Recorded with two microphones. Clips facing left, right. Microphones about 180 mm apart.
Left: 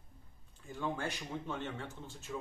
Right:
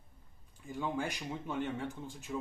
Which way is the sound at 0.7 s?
15° right (ahead or behind).